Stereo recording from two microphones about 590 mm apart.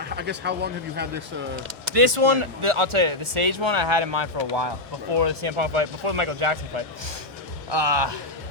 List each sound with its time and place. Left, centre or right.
0.0 s speech: centre
1.9 s speech: right
7.7 s speech: right